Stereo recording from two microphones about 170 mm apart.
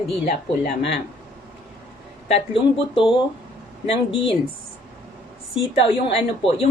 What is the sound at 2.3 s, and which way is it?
Speech, 30° left (ahead or behind).